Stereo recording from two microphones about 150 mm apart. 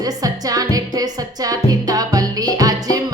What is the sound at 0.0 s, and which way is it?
Music, 25° right (ahead or behind).